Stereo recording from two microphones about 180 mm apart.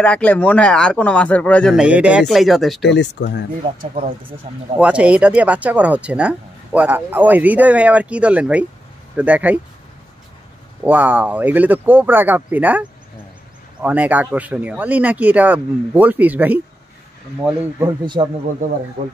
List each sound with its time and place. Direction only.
0.0 s speech: 5° left (ahead or behind)
1.8 s speech: 5° right (ahead or behind)
2.8 s speech: 70° left (ahead or behind)
3.6 s speech: 35° right (ahead or behind)
4.7 s speech: 5° right (ahead or behind)
10.8 s speech: 10° right (ahead or behind)
13.8 s speech: 10° right (ahead or behind)
18.0 s speech: 25° right (ahead or behind)